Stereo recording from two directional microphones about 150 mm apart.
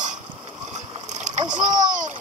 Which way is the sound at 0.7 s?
50° right (ahead or behind).